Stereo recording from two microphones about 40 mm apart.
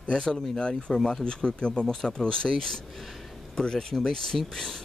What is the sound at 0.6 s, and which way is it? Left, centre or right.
Speech, left.